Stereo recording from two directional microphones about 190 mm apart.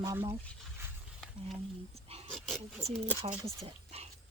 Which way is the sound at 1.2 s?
Centre (ahead or behind).